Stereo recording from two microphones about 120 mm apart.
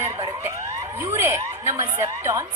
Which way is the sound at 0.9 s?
20° right (ahead or behind).